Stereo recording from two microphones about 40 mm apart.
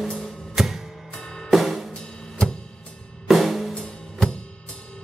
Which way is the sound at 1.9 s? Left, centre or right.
Centre.